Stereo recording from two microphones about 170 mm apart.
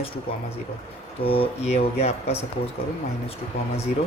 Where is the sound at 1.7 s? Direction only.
40° left (ahead or behind).